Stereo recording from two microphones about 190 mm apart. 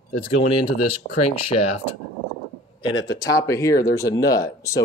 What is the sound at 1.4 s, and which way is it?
Speech, 30° left (ahead or behind).